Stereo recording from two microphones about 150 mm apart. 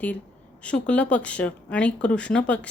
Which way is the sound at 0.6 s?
10° left (ahead or behind).